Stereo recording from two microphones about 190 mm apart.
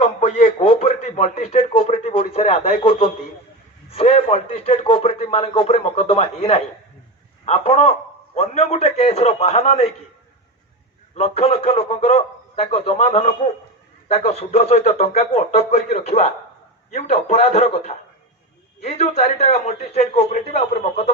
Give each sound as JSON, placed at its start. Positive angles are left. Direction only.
{"t": 0.0, "sound": "a man's voice", "side_deg": 30}
{"t": 11.1, "sound": "a man's voice", "side_deg": 30}